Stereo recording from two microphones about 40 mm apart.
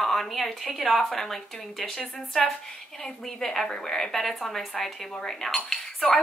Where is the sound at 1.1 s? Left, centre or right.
Centre.